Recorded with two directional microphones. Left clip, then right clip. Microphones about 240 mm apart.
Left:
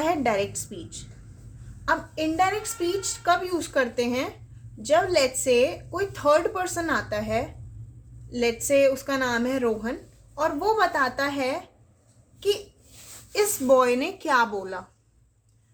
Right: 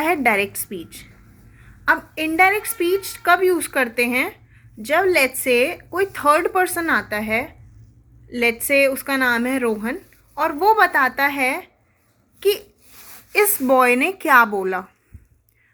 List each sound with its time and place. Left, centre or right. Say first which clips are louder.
0.0 s a woman's voice: right 6 dB; centre
1.8 s a woman's voice: right 6 dB; centre
8.6 s a woman's voice: right 1 dB; right
13.3 s a woman's voice: right 4 dB; right